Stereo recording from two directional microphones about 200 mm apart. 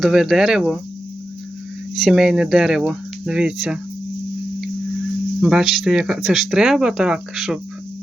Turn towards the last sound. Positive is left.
turn(degrees=0)  # may be behind; listen again after turning